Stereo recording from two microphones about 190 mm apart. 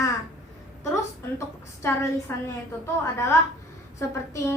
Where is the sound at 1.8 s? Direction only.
15° left (ahead or behind).